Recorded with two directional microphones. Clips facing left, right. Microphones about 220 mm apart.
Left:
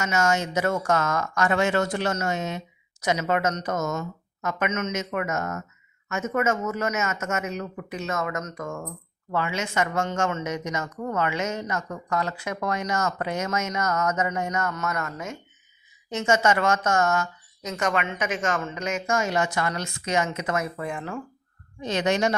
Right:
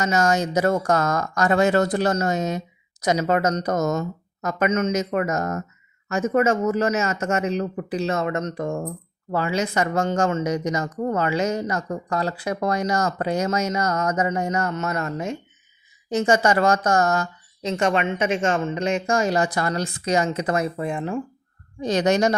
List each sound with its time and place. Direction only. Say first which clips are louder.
0.0 s speech: right 4 dB; 35° right (ahead or behind)
21.8 s speech: right 4 dB; 35° right (ahead or behind)